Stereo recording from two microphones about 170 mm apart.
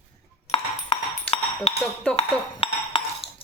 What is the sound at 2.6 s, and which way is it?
Cutlery, 35° left (ahead or behind).